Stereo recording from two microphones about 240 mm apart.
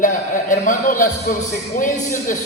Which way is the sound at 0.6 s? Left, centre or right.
Left.